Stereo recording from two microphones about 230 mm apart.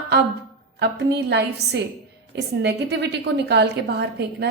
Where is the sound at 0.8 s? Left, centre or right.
Right.